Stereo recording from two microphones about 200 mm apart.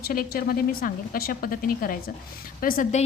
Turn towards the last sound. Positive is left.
turn(degrees=35)  # may be behind; listen again after turning